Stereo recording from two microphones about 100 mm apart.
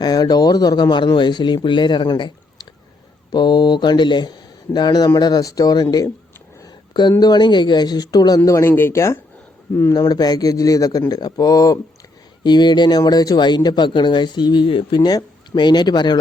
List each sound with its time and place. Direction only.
0.0 s speech: 40° left (ahead or behind)
7.2 s speech: 45° left (ahead or behind)
8.4 s speech: 30° left (ahead or behind)
10.0 s speech: 40° left (ahead or behind)